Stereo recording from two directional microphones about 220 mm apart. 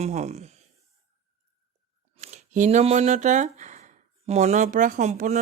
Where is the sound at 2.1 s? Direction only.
35° right (ahead or behind).